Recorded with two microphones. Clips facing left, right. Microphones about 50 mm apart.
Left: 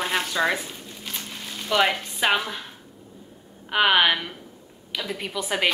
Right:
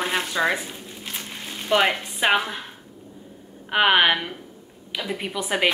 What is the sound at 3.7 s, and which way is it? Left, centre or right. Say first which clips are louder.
Speech: right 1 dB; centre.